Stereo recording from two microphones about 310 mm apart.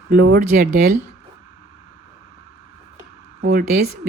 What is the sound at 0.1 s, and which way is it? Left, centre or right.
Speech, right.